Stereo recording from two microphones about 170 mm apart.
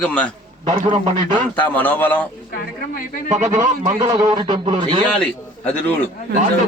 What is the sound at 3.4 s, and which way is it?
A man's voice, 20° right (ahead or behind).